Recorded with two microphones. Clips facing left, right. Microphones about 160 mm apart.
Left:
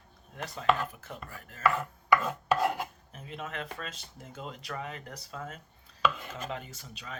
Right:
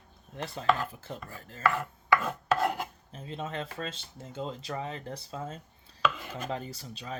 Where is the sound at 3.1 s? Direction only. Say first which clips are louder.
Right 3 dB; 30° right (ahead or behind).